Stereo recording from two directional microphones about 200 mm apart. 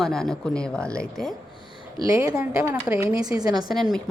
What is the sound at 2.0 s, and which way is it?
A woman's voice, 15° right (ahead or behind).